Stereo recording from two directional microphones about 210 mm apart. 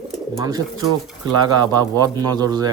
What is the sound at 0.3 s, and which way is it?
Speech, 20° right (ahead or behind).